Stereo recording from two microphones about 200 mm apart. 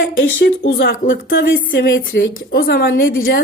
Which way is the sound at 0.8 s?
55° left (ahead or behind).